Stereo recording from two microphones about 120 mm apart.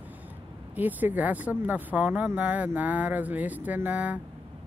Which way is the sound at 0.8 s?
15° right (ahead or behind).